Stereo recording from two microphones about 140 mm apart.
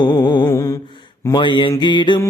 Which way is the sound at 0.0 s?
30° left (ahead or behind).